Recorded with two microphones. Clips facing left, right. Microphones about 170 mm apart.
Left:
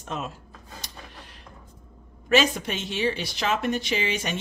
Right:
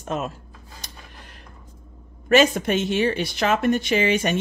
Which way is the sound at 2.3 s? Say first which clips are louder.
Right 5 dB; 50° right (ahead or behind).